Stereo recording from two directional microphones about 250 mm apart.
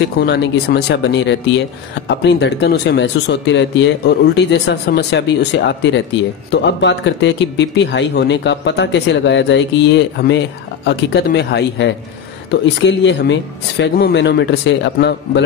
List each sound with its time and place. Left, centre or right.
0.2 s speech: left